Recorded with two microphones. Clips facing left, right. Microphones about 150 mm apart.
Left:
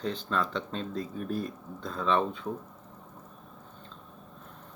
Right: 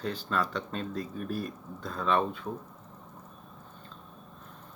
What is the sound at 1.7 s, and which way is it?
Speech, 10° right (ahead or behind).